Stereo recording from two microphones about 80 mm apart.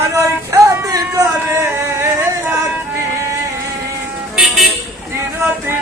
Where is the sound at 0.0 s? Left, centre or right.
Right.